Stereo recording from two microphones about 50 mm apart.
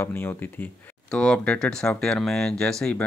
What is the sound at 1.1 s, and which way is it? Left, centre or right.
Speech, centre.